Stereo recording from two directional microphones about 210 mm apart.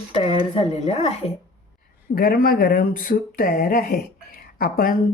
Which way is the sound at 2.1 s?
45° left (ahead or behind).